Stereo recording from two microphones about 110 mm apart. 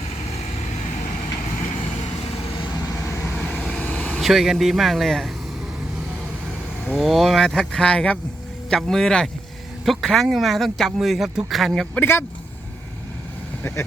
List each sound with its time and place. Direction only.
2.7 s vehicle: 25° left (ahead or behind)
3.3 s vehicle: 5° left (ahead or behind)
4.2 s speech: 5° right (ahead or behind)
6.9 s speech: 5° right (ahead or behind)
11.9 s speech: 20° left (ahead or behind)